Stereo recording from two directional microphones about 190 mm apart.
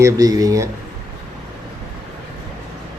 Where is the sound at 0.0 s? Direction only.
20° right (ahead or behind).